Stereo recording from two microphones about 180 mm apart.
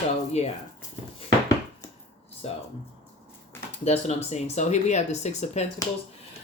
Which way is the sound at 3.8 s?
35° left (ahead or behind).